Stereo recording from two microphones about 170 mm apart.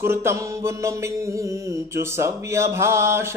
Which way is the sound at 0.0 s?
15° right (ahead or behind).